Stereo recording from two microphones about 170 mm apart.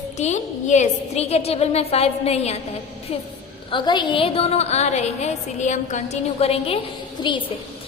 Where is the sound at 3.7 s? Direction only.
25° left (ahead or behind).